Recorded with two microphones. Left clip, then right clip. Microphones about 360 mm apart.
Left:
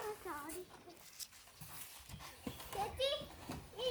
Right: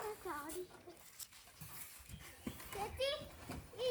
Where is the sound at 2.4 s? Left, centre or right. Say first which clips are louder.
Left 3 dB; left.